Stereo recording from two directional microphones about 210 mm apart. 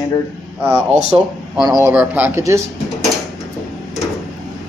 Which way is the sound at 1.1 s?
15° right (ahead or behind).